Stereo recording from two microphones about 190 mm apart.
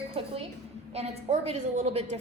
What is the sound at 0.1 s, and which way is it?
A woman's voice, 30° right (ahead or behind).